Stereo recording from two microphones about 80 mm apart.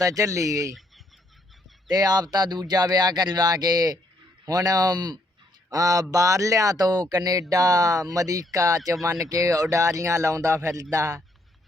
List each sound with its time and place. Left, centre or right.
0.0 s speech: right
0.7 s chicken: centre
1.9 s speech: right
5.7 s speech: right